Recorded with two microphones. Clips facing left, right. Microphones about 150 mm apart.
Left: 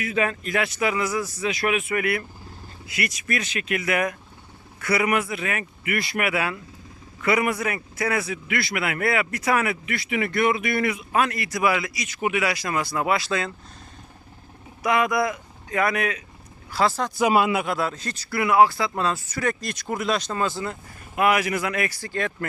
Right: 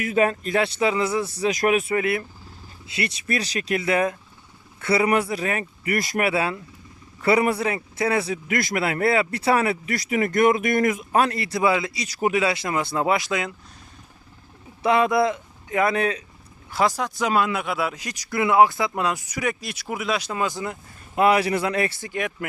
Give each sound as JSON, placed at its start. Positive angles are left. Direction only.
{"t": 0.0, "sound": "a man's voice", "side_deg": -40}
{"t": 2.0, "sound": "a man's voice", "side_deg": -25}
{"t": 14.8, "sound": "speech", "side_deg": -30}
{"t": 16.6, "sound": "speech", "side_deg": -20}
{"t": 17.2, "sound": "speech", "side_deg": 10}
{"t": 17.7, "sound": "speech", "side_deg": -10}
{"t": 21.2, "sound": "speech", "side_deg": -30}